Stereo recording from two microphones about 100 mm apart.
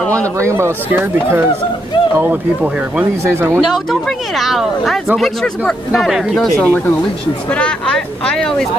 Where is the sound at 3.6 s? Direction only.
Centre (ahead or behind).